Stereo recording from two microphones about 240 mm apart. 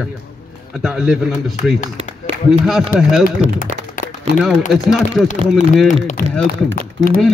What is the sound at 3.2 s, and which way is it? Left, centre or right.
Speech, left.